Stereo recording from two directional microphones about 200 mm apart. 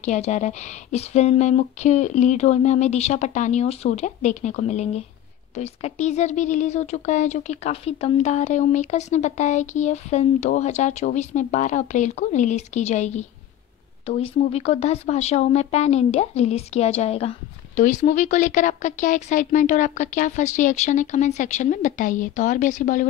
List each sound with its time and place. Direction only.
0.0 s speech: 35° left (ahead or behind)